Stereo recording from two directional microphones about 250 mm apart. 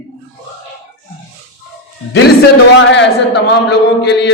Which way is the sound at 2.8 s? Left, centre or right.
Left.